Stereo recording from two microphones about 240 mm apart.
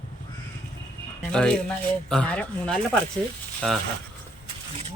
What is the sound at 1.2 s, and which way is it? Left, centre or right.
Speech, centre.